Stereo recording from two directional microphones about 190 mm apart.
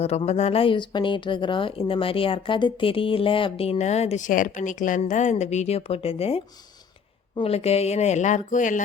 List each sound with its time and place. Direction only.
0.0 s a woman's voice: 35° left (ahead or behind)